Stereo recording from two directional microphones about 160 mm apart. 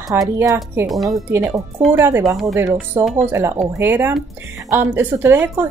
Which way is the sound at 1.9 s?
15° right (ahead or behind).